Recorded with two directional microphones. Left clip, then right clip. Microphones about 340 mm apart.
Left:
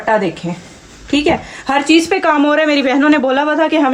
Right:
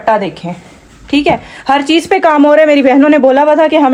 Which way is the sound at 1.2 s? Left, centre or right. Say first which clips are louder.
Right 4 dB; centre.